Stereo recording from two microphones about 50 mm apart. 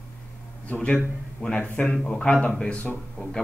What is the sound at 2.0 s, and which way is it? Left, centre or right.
Speech, centre.